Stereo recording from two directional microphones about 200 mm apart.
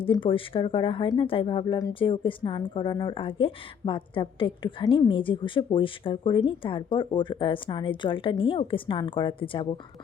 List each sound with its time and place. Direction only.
0.0 s speech: 25° left (ahead or behind)